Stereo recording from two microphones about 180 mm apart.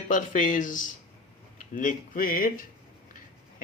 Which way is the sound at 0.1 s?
45° left (ahead or behind).